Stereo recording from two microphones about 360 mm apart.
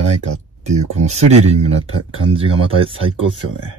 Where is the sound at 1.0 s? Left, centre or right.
Centre.